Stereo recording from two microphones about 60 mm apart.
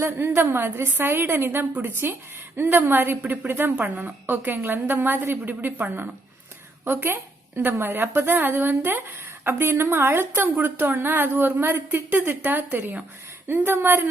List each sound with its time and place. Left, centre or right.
0.0 s a woman's voice: right